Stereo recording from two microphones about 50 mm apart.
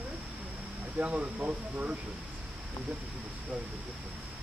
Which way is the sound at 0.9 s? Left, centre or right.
Right.